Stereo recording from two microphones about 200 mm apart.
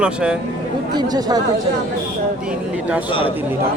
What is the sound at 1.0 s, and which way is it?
Speech, 20° right (ahead or behind).